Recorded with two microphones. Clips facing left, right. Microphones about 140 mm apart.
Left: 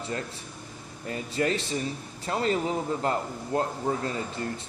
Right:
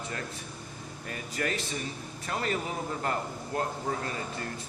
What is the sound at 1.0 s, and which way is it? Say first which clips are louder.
A man's voice: left 6 dB; 25° left (ahead or behind).